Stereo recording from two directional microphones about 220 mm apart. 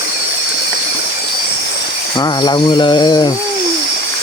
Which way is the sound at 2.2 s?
20° left (ahead or behind).